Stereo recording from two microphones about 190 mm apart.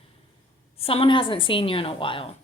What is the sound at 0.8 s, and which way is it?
Speech, 30° left (ahead or behind).